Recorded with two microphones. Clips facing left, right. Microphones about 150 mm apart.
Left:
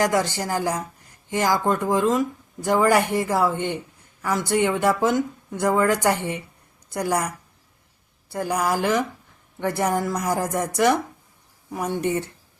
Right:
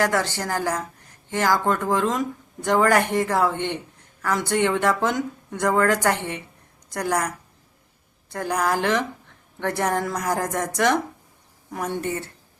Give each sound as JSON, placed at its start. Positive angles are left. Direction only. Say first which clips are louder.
{"t": 0.0, "sound": "speech", "louder": "left 1 dB", "side_deg": 15}
{"t": 8.3, "sound": "speech", "louder": "even", "side_deg": 10}